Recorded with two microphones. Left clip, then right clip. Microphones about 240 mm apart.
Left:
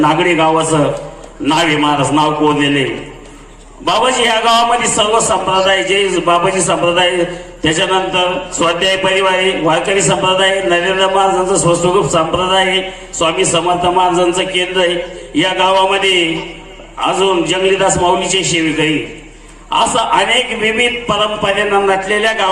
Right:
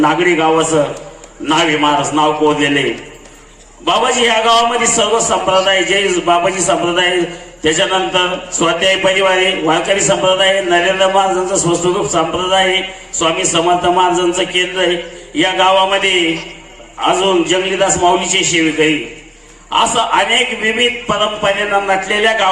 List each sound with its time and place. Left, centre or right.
0.0 s a man's voice: left
3.8 s a man's voice: left